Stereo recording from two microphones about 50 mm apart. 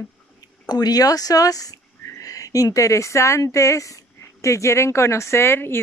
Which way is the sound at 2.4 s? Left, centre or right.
Left.